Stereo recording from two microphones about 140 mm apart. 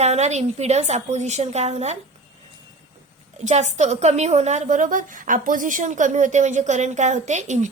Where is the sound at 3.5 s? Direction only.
55° right (ahead or behind).